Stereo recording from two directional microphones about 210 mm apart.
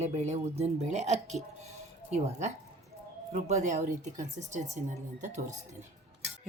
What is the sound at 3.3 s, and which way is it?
Speech, 35° right (ahead or behind).